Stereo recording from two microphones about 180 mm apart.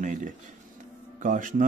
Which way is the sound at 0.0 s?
45° right (ahead or behind).